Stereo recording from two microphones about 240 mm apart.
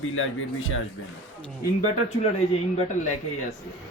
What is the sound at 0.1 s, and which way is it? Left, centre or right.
Speech, left.